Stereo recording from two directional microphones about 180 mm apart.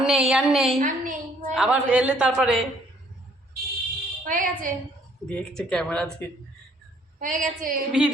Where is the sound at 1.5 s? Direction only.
5° right (ahead or behind).